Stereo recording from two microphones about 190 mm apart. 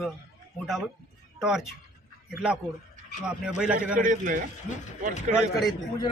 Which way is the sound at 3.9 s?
45° right (ahead or behind).